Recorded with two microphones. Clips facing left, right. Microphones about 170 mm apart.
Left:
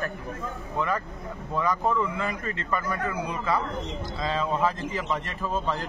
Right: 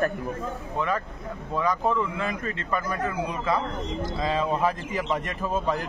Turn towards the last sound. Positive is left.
turn(degrees=-15)  # may be behind; listen again after turning